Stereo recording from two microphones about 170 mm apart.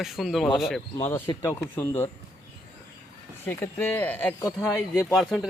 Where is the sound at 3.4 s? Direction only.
10° left (ahead or behind).